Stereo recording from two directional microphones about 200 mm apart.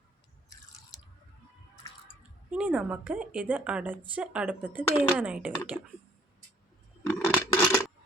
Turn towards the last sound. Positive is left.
turn(degrees=10)  # may be behind; listen again after turning